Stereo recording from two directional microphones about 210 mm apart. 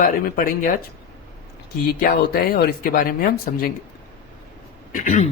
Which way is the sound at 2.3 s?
45° left (ahead or behind).